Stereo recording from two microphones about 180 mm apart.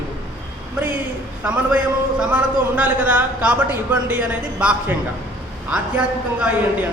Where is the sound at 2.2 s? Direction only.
10° right (ahead or behind).